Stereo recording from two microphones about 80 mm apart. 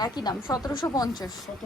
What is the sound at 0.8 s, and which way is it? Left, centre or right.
Speech, left.